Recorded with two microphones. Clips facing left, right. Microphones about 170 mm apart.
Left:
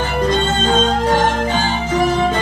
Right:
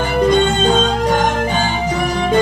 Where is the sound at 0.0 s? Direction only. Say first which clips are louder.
Right 4 dB; 10° right (ahead or behind).